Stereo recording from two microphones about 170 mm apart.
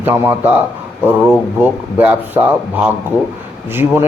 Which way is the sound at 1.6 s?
10° right (ahead or behind).